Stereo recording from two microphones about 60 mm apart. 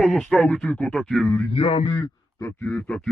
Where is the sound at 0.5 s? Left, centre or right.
Left.